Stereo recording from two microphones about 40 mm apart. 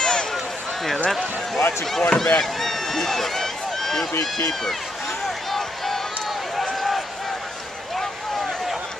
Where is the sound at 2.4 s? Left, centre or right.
Centre.